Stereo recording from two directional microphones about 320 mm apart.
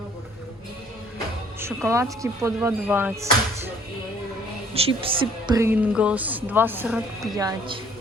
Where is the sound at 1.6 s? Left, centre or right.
Centre.